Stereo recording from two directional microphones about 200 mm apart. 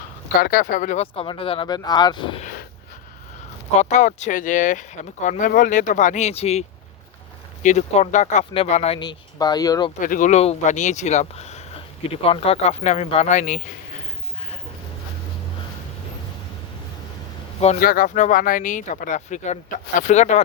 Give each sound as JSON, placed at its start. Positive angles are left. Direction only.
{"t": 0.4, "sound": "speech", "side_deg": 45}
{"t": 2.4, "sound": "a sound", "side_deg": 40}
{"t": 3.8, "sound": "speech", "side_deg": 35}
{"t": 10.0, "sound": "speech", "side_deg": 40}
{"t": 17.7, "sound": "speech", "side_deg": 45}